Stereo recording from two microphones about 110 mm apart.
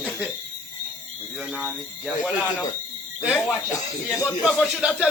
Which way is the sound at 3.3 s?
Centre (ahead or behind).